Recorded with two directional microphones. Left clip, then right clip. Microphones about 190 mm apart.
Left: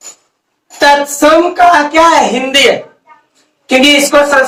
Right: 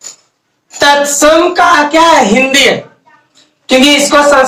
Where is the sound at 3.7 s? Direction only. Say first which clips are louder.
Even; 20° right (ahead or behind).